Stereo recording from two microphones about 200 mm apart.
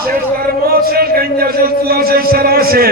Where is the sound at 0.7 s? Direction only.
50° right (ahead or behind).